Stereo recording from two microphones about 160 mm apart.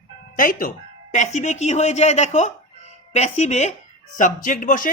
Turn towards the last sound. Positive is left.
turn(degrees=55)  # may be behind; listen again after turning